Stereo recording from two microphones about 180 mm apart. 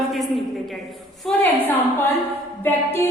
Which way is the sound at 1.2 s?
5° left (ahead or behind).